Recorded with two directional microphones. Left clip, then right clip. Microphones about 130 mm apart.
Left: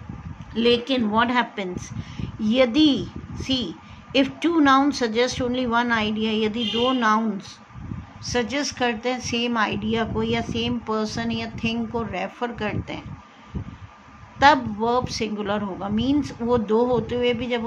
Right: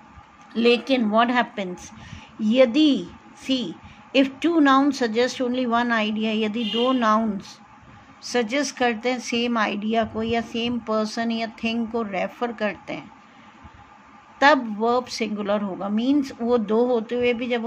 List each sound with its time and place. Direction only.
0.6 s speech: 35° right (ahead or behind)
14.4 s speech: 25° right (ahead or behind)